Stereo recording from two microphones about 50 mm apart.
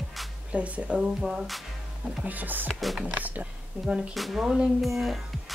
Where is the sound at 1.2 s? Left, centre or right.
Centre.